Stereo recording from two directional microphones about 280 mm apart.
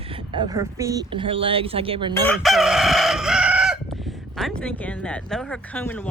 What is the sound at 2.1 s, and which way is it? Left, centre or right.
Chicken, centre.